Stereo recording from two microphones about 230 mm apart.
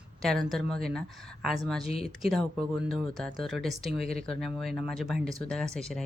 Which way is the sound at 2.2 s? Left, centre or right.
Centre.